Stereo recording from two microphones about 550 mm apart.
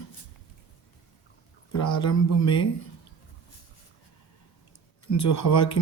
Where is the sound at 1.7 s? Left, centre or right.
Left.